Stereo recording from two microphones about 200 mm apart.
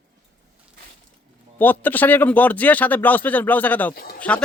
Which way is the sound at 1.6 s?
10° left (ahead or behind).